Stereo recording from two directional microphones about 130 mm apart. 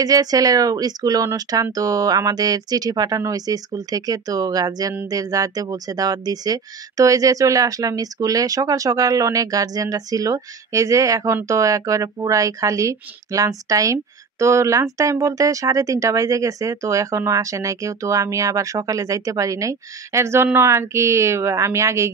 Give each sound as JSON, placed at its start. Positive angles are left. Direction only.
{"t": 0.0, "sound": "speech", "side_deg": -30}